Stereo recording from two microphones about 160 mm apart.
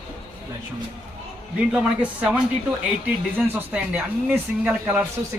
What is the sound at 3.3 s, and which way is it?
Speech, 10° right (ahead or behind).